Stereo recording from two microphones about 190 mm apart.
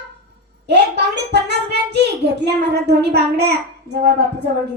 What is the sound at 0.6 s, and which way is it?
A child's voice, 60° right (ahead or behind).